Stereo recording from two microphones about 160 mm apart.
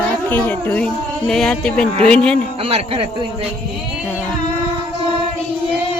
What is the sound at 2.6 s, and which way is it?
Speech, 35° right (ahead or behind).